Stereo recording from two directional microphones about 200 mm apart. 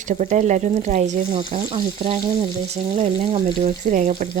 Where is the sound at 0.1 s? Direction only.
35° right (ahead or behind).